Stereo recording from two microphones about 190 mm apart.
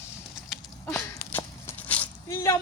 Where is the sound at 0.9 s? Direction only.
10° left (ahead or behind).